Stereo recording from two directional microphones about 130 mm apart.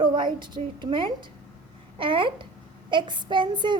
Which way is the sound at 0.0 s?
35° right (ahead or behind).